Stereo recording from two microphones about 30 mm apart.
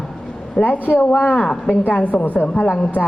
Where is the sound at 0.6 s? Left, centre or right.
Left.